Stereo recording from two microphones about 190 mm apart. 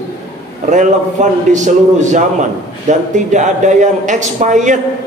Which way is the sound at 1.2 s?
40° right (ahead or behind).